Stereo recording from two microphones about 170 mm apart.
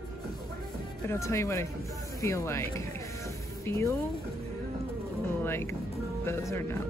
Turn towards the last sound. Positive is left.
turn(degrees=15)  # may be behind; listen again after turning